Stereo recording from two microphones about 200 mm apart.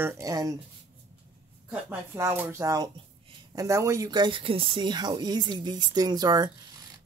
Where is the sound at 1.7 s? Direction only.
10° right (ahead or behind).